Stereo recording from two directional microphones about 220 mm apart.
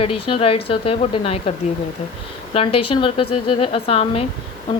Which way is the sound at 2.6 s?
25° left (ahead or behind).